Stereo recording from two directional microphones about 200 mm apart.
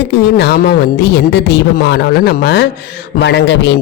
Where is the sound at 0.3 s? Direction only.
55° left (ahead or behind).